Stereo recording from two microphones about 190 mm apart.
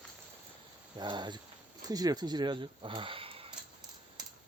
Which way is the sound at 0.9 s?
25° right (ahead or behind).